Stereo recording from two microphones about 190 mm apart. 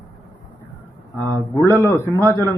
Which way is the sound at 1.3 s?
15° left (ahead or behind).